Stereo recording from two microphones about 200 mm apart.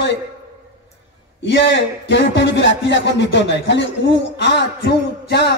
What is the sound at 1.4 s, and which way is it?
Speech, 65° left (ahead or behind).